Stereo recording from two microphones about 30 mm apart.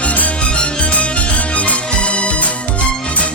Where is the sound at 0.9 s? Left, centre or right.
Left.